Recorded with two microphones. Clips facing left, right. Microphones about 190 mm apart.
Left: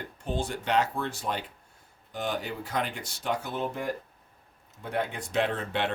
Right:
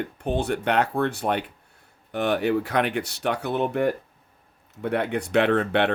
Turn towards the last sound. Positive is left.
turn(degrees=-65)  # may be behind; listen again after turning